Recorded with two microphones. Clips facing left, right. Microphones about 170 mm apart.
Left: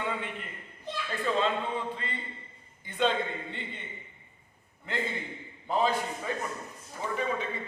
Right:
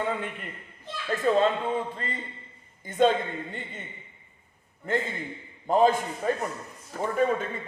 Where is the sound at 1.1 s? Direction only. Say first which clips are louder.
Right 6 dB; 45° right (ahead or behind).